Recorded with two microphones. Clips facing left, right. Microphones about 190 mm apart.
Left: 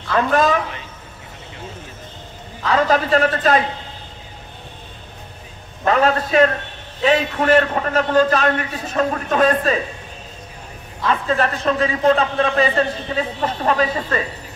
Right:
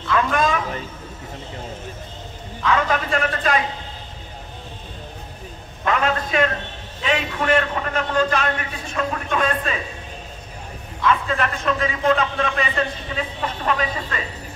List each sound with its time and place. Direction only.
0.1 s a man's voice: 40° left (ahead or behind)
2.6 s a man's voice: 35° left (ahead or behind)
5.9 s a man's voice: 40° left (ahead or behind)
11.0 s a man's voice: 35° left (ahead or behind)